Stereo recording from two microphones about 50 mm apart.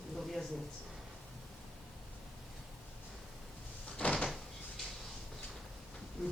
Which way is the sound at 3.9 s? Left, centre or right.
Centre.